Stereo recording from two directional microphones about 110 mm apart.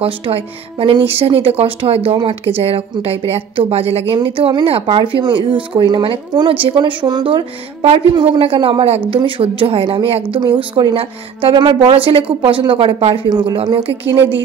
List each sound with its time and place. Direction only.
0.0 s a woman's voice: 60° right (ahead or behind); by 7.4 s 45° right (ahead or behind)
7.8 s speech: 60° right (ahead or behind)
9.8 s a woman's voice: 45° right (ahead or behind)
11.9 s a woman's voice: 55° right (ahead or behind)